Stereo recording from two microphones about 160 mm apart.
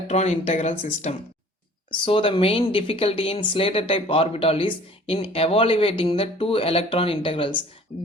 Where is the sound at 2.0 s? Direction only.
35° left (ahead or behind).